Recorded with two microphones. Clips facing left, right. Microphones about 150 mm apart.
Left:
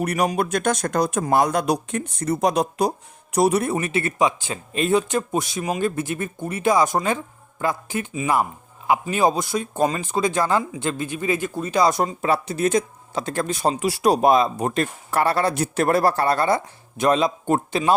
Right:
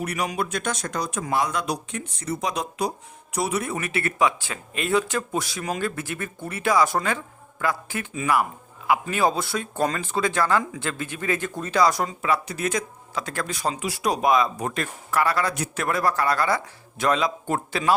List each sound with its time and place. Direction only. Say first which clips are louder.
0.0 s speech: left 5 dB; 45° left (ahead or behind); by 11.8 s 10° left (ahead or behind)
11.8 s speech: left 2 dB; 25° left (ahead or behind)